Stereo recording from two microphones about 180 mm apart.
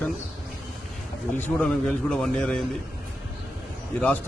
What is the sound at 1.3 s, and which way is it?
A man's voice, 10° left (ahead or behind).